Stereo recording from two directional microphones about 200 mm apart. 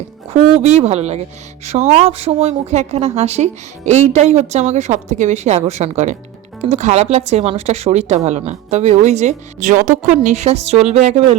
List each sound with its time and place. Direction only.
0.3 s speech: 35° right (ahead or behind)